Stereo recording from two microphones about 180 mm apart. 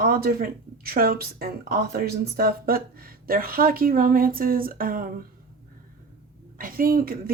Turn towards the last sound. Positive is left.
turn(degrees=-55)  # may be behind; listen again after turning